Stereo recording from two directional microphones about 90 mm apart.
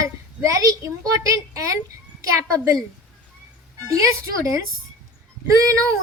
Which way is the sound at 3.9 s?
35° right (ahead or behind).